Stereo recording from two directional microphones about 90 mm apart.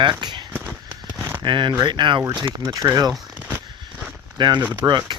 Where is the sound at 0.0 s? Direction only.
55° right (ahead or behind).